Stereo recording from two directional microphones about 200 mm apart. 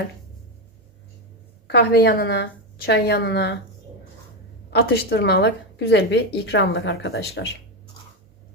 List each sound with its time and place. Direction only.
1.6 s a woman's voice: 50° left (ahead or behind)
4.7 s a woman's voice: 55° left (ahead or behind)